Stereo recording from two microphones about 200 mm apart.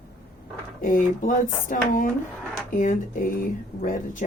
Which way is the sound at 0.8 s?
40° left (ahead or behind).